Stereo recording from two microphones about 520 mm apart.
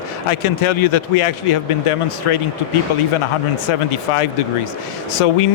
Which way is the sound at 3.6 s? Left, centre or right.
Left.